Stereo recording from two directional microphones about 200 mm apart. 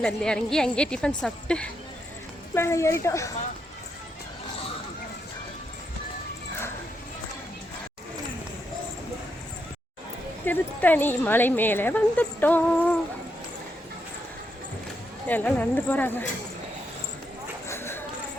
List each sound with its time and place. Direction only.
0.0 s a woman's voice: 5° left (ahead or behind)
10.4 s speech: 10° left (ahead or behind)
15.3 s speech: 10° left (ahead or behind)
17.7 s a sound: 10° left (ahead or behind)